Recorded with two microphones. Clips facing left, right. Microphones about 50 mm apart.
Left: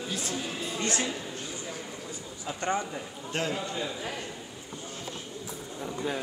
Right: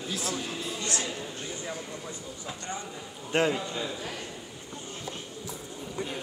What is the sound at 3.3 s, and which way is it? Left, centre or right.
Speech, centre.